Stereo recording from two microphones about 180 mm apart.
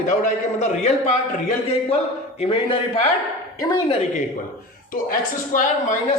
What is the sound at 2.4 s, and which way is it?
A man's voice, 30° left (ahead or behind).